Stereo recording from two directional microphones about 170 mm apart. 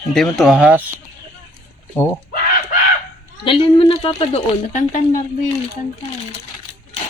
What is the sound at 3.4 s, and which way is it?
Speech, 30° left (ahead or behind).